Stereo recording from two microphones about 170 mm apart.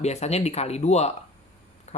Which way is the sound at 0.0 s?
40° left (ahead or behind).